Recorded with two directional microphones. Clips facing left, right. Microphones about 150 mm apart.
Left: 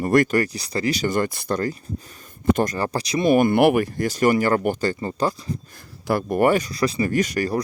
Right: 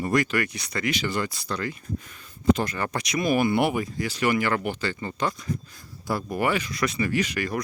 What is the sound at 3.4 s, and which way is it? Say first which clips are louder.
Speech: left 6 dB; 55° left (ahead or behind).